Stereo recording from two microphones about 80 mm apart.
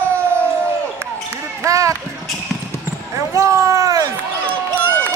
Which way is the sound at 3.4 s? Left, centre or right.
Right.